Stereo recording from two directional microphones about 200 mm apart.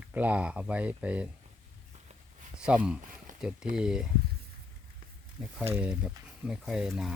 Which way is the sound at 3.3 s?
40° right (ahead or behind).